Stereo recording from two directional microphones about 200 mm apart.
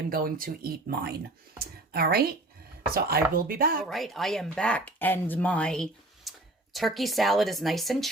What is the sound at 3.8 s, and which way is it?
Speech, centre (ahead or behind).